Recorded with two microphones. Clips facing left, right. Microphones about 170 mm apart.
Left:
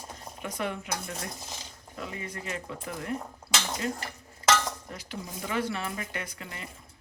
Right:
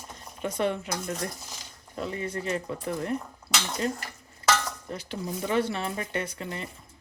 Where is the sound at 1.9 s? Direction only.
35° right (ahead or behind).